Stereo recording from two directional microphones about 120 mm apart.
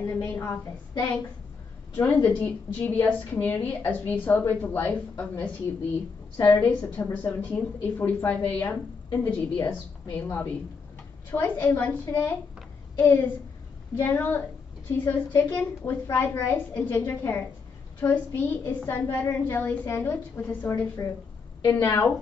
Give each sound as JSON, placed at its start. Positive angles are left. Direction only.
{"t": 0.0, "sound": "a woman's voice", "side_deg": 25}
{"t": 2.0, "sound": "a woman's voice", "side_deg": 15}
{"t": 6.4, "sound": "a woman's voice", "side_deg": 15}
{"t": 21.0, "sound": "a woman's voice", "side_deg": 30}